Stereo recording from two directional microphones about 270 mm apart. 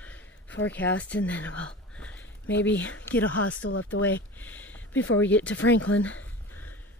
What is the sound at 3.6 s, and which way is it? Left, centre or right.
Speech, left.